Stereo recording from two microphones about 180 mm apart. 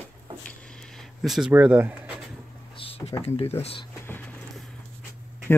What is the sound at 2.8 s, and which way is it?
Speech, 30° left (ahead or behind).